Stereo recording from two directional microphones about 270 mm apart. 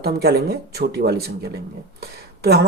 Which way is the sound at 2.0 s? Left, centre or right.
Right.